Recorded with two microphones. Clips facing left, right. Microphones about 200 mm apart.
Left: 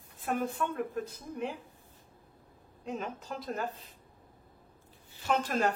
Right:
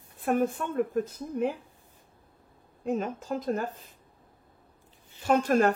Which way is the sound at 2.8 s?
45° right (ahead or behind).